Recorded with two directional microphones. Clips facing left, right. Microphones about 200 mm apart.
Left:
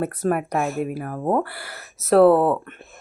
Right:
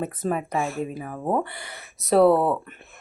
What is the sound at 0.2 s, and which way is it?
Speech, 10° left (ahead or behind).